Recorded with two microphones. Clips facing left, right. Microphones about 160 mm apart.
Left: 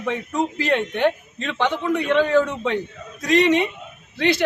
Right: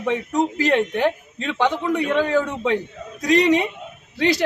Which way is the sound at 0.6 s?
40° right (ahead or behind).